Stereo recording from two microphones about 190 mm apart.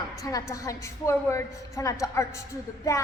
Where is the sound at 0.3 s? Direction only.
15° left (ahead or behind).